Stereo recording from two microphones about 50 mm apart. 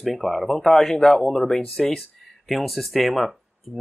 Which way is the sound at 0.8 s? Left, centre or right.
Centre.